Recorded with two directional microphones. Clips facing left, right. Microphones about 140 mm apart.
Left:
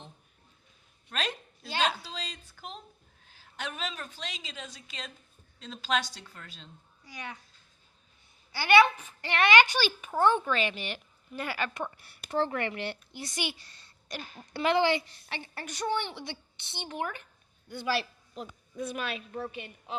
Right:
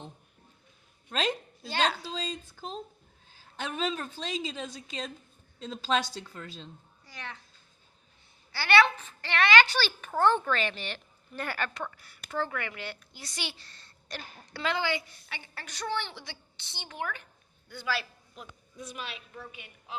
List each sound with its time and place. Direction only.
1.1 s a woman's voice: 25° right (ahead or behind)
1.6 s a child's voice: 5° left (ahead or behind)
2.0 s a woman's voice: 25° right (ahead or behind)
7.0 s a sound: 15° left (ahead or behind)
8.5 s a child's voice: 20° left (ahead or behind)
11.7 s a woman's voice: 25° left (ahead or behind)
14.5 s a woman's voice: 25° left (ahead or behind)
18.8 s a woman's voice: 55° left (ahead or behind)